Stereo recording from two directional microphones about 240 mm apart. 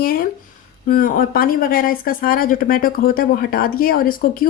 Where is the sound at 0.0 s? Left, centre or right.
Left.